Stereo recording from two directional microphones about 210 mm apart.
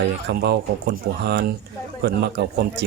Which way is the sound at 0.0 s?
50° right (ahead or behind).